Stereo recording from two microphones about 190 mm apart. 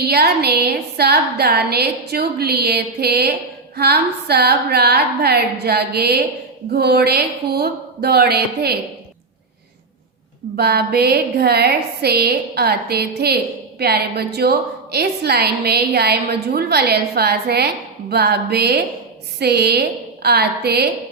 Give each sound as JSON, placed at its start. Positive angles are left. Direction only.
{"t": 0.0, "sound": "a woman's voice", "side_deg": -55}
{"t": 10.6, "sound": "a woman's voice", "side_deg": -55}